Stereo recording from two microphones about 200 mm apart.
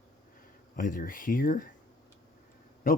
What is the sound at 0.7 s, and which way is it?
Speech, 45° left (ahead or behind).